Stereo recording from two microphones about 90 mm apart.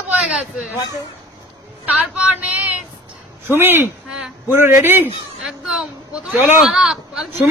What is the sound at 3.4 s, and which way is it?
A man's voice, 25° right (ahead or behind).